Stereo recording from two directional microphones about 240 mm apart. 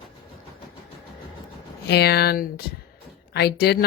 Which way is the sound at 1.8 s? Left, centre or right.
Left.